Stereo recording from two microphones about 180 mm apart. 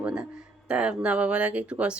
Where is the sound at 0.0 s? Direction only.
5° right (ahead or behind).